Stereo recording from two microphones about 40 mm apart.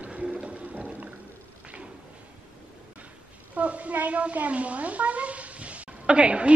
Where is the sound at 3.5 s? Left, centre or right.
Right.